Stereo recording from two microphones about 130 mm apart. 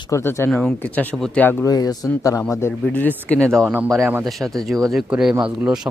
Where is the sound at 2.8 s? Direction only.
10° left (ahead or behind); by 5.8 s 5° right (ahead or behind).